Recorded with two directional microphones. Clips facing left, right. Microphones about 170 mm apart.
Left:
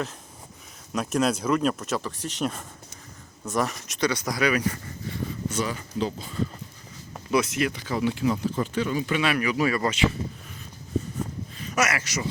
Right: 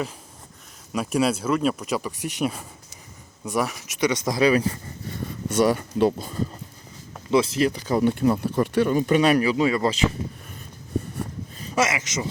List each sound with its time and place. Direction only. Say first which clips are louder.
0.9 s speech: right 2 dB; 10° right (ahead or behind); by 4.8 s 30° right (ahead or behind)
5.5 s speech: right 12 dB; 55° right (ahead or behind)
7.3 s speech: right 4 dB; 25° right (ahead or behind)
11.6 s speech: right 2 dB; 25° right (ahead or behind)